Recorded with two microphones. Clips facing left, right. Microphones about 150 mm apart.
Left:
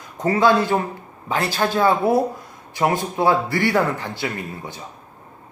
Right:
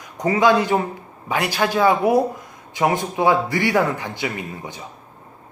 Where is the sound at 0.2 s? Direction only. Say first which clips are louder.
Even; 15° right (ahead or behind).